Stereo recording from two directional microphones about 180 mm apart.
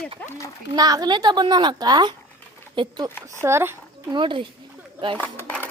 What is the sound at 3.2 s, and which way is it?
Speech, 15° right (ahead or behind).